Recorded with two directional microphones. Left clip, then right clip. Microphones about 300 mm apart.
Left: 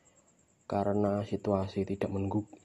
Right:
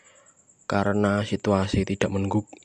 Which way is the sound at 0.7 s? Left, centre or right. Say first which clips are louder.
Right 6 dB; right.